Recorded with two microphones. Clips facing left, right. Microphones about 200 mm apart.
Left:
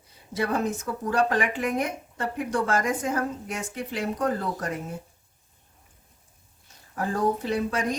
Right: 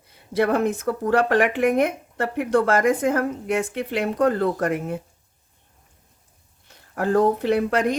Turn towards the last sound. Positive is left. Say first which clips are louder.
# right 6 dB
turn(degrees=-60)  # may be behind; listen again after turning